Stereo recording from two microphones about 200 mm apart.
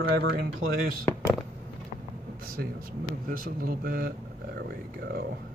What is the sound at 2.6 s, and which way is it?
Speech, 55° right (ahead or behind).